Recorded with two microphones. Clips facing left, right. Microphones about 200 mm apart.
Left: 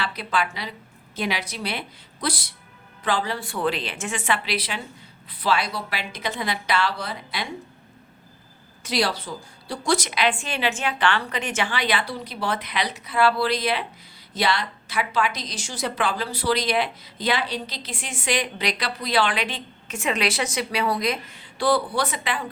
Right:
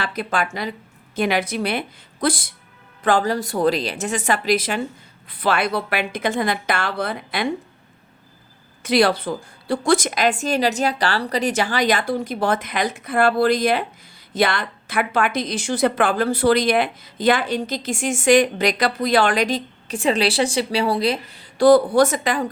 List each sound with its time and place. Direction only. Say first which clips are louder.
0.0 s a woman's voice: right 3 dB; 50° right (ahead or behind)
8.8 s a woman's voice: right 8 dB; 55° right (ahead or behind)